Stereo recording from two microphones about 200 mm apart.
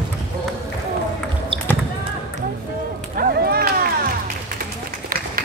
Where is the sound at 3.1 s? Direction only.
50° right (ahead or behind).